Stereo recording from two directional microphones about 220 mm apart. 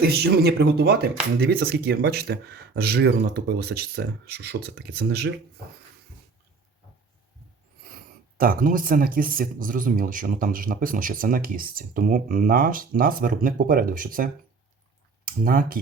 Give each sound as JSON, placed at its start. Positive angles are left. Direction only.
{"t": 0.0, "sound": "speech", "side_deg": -45}
{"t": 7.9, "sound": "speech", "side_deg": -40}